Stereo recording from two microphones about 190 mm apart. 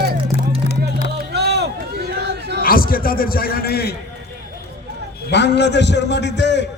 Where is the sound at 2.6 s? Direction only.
50° left (ahead or behind).